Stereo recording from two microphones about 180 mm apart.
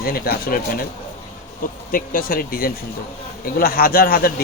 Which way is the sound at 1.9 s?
50° left (ahead or behind).